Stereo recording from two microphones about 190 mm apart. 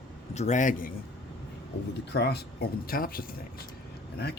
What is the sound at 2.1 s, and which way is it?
Speech, 60° left (ahead or behind).